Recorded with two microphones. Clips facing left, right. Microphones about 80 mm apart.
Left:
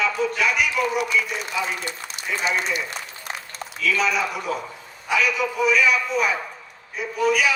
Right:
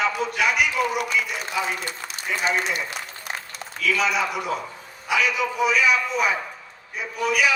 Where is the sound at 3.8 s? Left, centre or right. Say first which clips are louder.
Even; right.